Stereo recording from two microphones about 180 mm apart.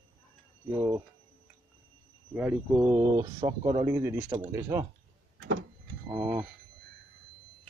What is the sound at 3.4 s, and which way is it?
Speech, 25° right (ahead or behind).